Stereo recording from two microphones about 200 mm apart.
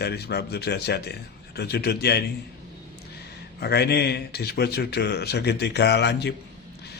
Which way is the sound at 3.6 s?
55° left (ahead or behind).